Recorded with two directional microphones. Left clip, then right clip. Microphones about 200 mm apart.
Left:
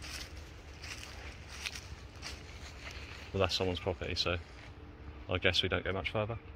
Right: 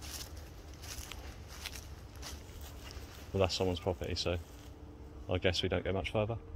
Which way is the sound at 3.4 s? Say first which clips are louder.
Even; 25° right (ahead or behind).